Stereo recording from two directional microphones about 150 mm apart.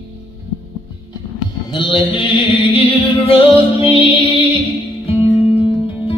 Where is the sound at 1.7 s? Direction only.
35° left (ahead or behind).